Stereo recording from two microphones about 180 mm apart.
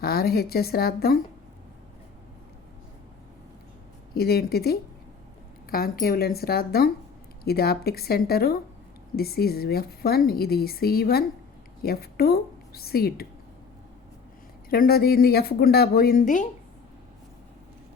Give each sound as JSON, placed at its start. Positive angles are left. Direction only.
{"t": 0.0, "sound": "speech", "side_deg": 60}
{"t": 4.1, "sound": "a woman's voice", "side_deg": 60}
{"t": 14.7, "sound": "speech", "side_deg": 55}